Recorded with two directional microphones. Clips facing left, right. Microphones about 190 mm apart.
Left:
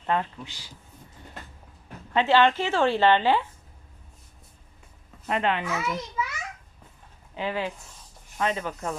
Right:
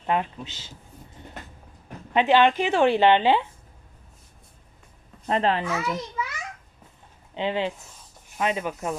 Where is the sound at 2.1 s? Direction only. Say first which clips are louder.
Right 2 dB; 15° right (ahead or behind).